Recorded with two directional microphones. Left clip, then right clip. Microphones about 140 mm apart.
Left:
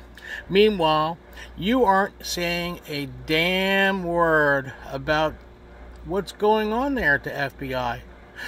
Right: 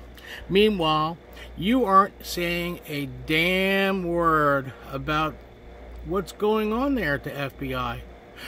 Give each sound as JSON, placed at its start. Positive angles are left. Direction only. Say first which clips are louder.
{"t": 0.3, "sound": "speech", "louder": "left 2 dB", "side_deg": -25}